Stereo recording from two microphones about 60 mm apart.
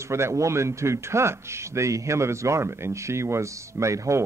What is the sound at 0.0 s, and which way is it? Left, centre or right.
A man's voice, right.